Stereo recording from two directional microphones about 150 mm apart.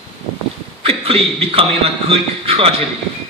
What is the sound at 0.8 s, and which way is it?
A man's voice, 40° right (ahead or behind).